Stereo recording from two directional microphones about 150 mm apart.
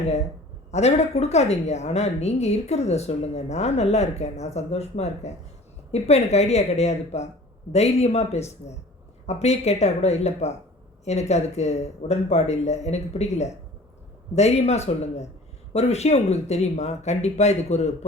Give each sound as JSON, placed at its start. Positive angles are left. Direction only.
{"t": 0.7, "sound": "a woman's voice", "side_deg": 45}